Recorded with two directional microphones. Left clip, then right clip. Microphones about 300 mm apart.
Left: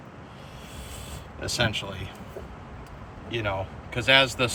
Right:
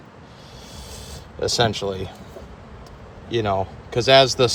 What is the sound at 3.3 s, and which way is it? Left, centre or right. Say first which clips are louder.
Speech: right 7 dB; centre.